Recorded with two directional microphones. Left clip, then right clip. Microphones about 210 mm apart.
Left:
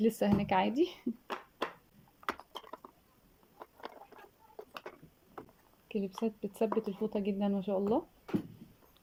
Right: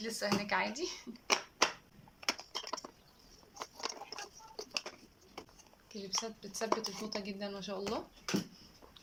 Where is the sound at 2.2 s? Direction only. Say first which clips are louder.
Right 1 dB; 10° right (ahead or behind).